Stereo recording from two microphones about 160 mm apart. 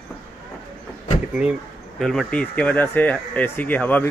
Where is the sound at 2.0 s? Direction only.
Centre (ahead or behind).